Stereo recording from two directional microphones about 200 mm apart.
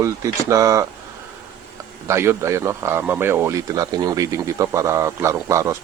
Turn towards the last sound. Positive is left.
turn(degrees=-15)  # may be behind; listen again after turning